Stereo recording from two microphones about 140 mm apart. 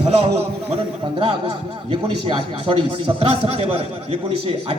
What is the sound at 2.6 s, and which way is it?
A man's voice, 40° right (ahead or behind).